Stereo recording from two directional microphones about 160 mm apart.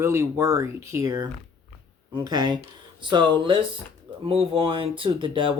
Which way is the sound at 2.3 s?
25° right (ahead or behind).